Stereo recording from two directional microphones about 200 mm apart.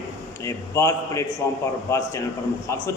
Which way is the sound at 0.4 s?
15° left (ahead or behind).